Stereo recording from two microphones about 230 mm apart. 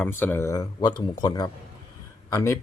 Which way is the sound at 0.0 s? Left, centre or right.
Centre.